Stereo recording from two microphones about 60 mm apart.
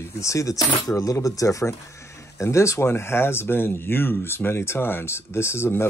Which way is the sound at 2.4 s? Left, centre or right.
Left.